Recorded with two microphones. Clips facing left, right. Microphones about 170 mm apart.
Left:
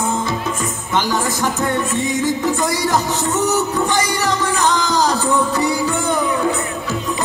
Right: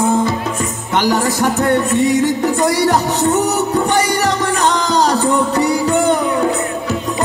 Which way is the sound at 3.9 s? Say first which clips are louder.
Right 3 dB; 70° right (ahead or behind).